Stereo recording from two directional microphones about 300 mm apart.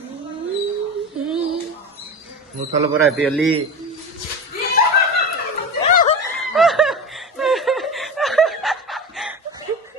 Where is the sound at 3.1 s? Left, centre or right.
Centre.